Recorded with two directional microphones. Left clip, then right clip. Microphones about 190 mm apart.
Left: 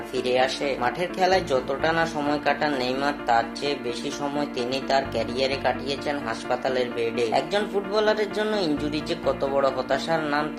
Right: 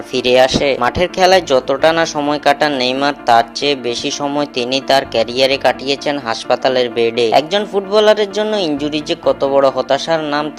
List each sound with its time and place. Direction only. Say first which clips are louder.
0.1 s speech: right 12 dB; 45° right (ahead or behind)